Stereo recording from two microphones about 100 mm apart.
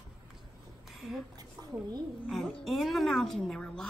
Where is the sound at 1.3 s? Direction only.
40° right (ahead or behind).